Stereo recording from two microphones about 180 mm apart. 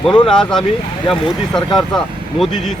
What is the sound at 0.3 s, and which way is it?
Speech, 5° left (ahead or behind).